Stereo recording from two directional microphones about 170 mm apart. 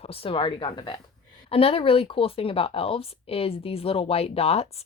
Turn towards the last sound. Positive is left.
turn(degrees=35)  # may be behind; listen again after turning